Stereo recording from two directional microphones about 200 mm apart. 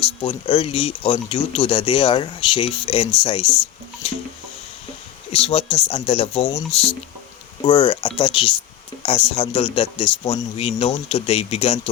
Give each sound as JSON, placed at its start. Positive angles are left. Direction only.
{"t": 0.0, "sound": "speech", "side_deg": 25}
{"t": 5.3, "sound": "speech", "side_deg": 30}